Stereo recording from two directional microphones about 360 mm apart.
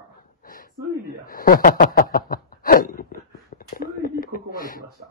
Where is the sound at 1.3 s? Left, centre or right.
Left.